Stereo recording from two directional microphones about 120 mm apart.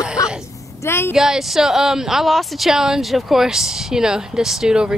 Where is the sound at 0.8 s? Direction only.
20° left (ahead or behind).